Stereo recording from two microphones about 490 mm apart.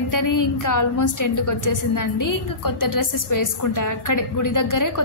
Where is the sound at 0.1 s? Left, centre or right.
Left.